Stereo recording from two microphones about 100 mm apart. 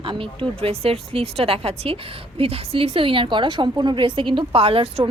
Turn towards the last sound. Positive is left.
turn(degrees=-65)  # may be behind; listen again after turning